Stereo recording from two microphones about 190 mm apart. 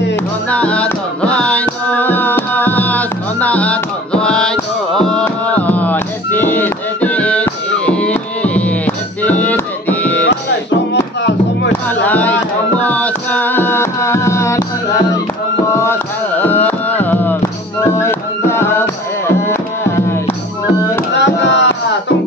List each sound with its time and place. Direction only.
0.1 s music: 5° left (ahead or behind)
10.2 s music: 70° left (ahead or behind)
12.0 s a sound: 10° left (ahead or behind)
12.8 s music: 10° left (ahead or behind)
15.7 s music: 15° left (ahead or behind)
21.2 s chop: 70° left (ahead or behind)